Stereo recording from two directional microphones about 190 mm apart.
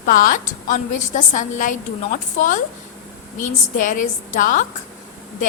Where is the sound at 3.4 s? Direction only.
45° left (ahead or behind).